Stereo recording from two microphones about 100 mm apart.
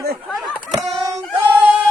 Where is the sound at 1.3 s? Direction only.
15° right (ahead or behind).